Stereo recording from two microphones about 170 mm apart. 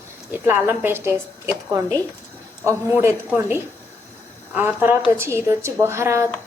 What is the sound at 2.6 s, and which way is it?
A woman's voice, 15° right (ahead or behind).